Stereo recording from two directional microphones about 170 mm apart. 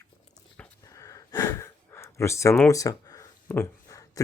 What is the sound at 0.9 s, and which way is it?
Gasp, 20° left (ahead or behind).